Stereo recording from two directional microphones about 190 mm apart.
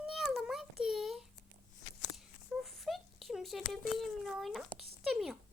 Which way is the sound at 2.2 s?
Centre (ahead or behind).